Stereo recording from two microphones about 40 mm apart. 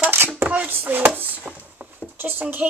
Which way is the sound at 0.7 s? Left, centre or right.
Right.